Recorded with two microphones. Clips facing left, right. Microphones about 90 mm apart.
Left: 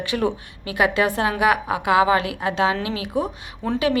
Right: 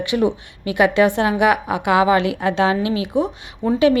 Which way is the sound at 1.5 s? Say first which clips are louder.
Right 2 dB; 30° left (ahead or behind).